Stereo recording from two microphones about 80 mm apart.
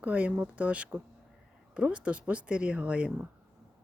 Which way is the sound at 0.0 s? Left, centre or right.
Centre.